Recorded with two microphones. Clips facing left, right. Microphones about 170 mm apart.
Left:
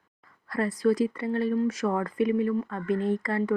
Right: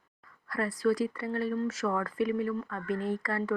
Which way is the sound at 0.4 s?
25° left (ahead or behind).